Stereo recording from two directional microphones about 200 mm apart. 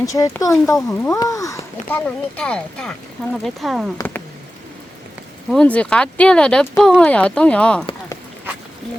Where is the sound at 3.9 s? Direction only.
10° left (ahead or behind).